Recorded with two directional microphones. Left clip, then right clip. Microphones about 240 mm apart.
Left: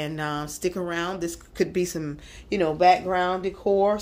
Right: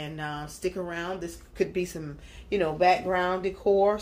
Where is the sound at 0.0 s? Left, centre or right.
Left.